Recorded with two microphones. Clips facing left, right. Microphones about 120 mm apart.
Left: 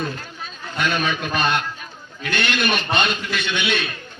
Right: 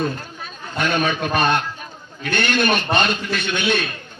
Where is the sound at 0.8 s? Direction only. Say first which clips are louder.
Right 2 dB; 45° right (ahead or behind).